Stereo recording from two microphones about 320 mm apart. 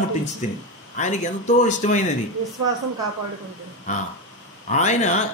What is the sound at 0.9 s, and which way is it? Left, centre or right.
Speech, left.